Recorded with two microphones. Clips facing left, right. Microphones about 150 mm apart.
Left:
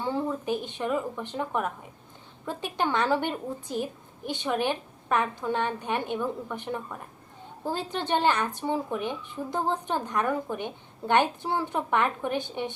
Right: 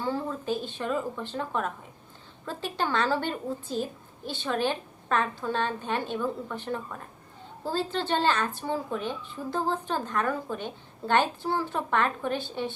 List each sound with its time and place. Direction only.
0.0 s speech: 20° left (ahead or behind)